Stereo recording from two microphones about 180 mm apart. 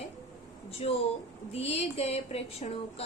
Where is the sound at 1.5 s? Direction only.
35° left (ahead or behind).